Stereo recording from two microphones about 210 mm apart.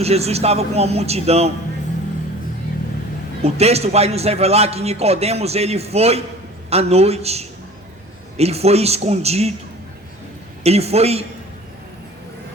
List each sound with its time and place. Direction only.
0.0 s a man's voice: 30° right (ahead or behind)
3.4 s a man's voice: 30° right (ahead or behind)
10.6 s a man's voice: 30° right (ahead or behind)